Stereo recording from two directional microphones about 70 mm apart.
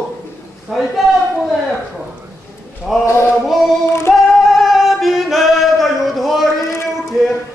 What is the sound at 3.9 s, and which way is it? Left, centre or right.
A capella, left.